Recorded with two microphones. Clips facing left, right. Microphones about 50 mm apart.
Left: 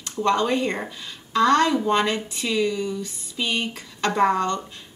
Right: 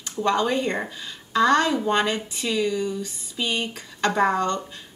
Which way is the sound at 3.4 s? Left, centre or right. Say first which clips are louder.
Left 1 dB; left.